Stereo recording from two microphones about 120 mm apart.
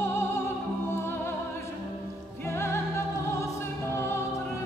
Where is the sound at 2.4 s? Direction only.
20° left (ahead or behind).